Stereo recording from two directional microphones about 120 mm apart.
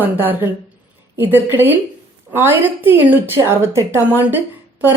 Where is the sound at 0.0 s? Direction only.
15° right (ahead or behind).